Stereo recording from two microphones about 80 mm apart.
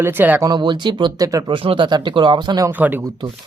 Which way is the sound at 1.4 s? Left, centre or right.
Right.